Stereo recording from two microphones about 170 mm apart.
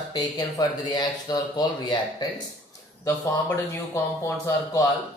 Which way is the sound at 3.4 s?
15° left (ahead or behind).